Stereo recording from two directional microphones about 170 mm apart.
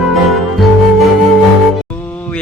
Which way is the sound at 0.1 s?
Centre (ahead or behind).